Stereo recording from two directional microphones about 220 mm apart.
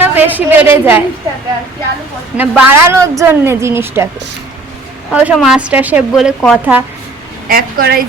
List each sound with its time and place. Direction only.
0.0 s a woman's voice: 10° right (ahead or behind)
2.4 s a woman's voice: 10° right (ahead or behind)
5.1 s speech: 5° right (ahead or behind)
7.4 s a woman's voice: 40° right (ahead or behind)